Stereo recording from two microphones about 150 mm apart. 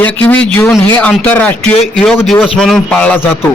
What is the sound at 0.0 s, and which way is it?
A man's voice, 10° left (ahead or behind).